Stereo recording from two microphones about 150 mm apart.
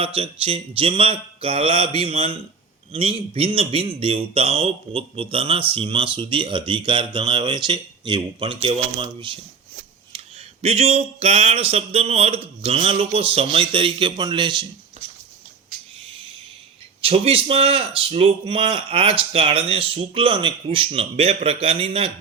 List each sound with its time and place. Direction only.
0.0 s speech: 40° right (ahead or behind)
10.6 s speech: 45° right (ahead or behind)
17.0 s speech: 40° right (ahead or behind)